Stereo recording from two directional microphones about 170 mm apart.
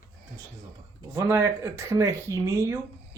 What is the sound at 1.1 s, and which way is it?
Speech, 15° right (ahead or behind).